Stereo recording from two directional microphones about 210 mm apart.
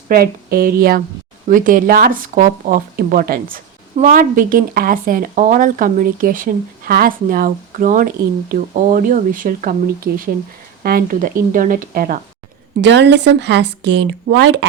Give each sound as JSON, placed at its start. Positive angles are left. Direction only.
{"t": 0.1, "sound": "a woman's voice", "side_deg": -45}
{"t": 12.8, "sound": "speech", "side_deg": -55}